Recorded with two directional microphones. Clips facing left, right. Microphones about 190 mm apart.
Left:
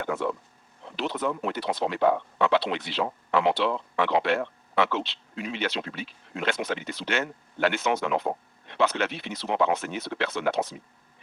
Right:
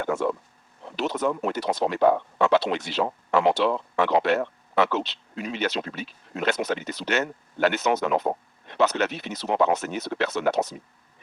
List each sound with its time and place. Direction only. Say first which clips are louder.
0.0 s speech: right 3 dB; 45° right (ahead or behind)